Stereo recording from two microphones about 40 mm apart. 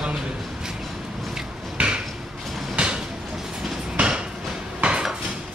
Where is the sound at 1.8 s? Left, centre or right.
Right.